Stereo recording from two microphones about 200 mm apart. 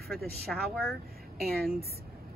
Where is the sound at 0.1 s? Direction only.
Centre (ahead or behind).